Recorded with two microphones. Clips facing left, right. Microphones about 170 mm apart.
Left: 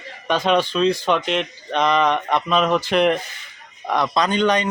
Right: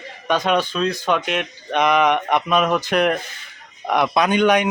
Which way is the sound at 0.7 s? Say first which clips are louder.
Left 2 dB; centre (ahead or behind).